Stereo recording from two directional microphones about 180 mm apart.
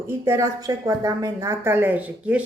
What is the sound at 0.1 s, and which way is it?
A woman's voice, 15° right (ahead or behind).